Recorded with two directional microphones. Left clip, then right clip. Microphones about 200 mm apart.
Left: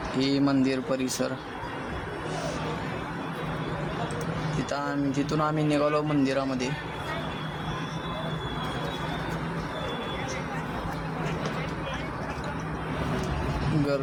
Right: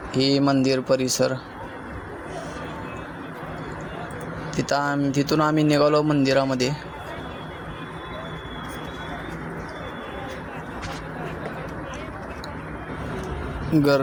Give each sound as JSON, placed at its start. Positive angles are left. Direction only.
{"t": 0.2, "sound": "a man's voice", "side_deg": -35}
{"t": 4.5, "sound": "a man's voice", "side_deg": -40}